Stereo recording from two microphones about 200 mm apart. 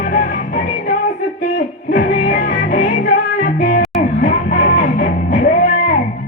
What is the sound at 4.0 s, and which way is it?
Music, 40° left (ahead or behind).